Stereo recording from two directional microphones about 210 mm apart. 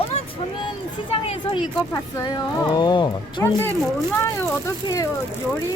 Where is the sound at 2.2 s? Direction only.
20° left (ahead or behind).